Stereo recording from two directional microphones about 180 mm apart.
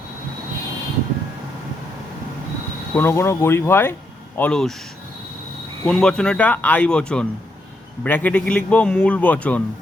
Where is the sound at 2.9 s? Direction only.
15° left (ahead or behind).